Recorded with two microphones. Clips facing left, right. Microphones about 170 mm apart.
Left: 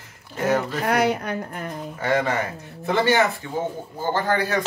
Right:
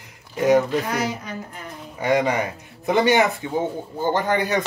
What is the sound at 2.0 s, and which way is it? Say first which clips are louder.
Speech: right 3 dB; 15° right (ahead or behind).